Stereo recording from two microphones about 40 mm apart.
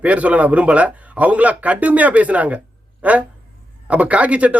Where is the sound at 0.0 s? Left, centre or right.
Right.